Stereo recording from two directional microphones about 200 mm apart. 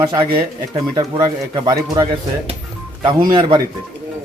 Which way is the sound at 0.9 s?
20° right (ahead or behind).